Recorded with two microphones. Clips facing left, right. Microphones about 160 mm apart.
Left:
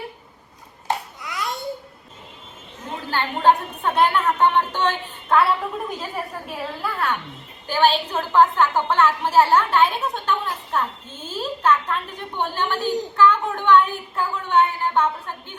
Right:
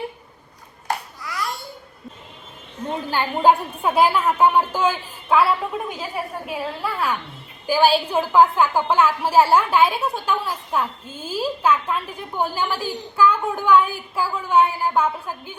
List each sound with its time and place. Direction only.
0.9 s babbling: 20° left (ahead or behind)
3.1 s a woman's voice: 10° right (ahead or behind)